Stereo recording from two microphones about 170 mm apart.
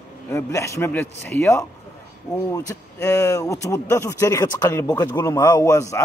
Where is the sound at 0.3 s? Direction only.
15° left (ahead or behind).